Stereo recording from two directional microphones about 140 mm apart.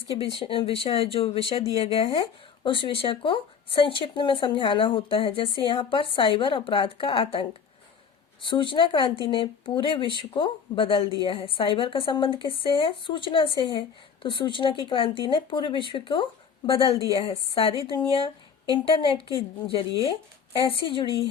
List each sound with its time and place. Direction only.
0.2 s speech: 40° left (ahead or behind)